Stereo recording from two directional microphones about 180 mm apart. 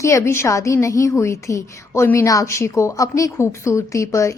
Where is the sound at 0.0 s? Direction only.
15° left (ahead or behind).